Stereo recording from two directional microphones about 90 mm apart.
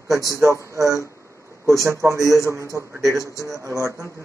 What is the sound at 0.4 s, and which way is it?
Speech, 35° right (ahead or behind).